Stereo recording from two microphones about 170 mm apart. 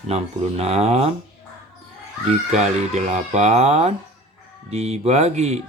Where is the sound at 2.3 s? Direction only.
40° right (ahead or behind).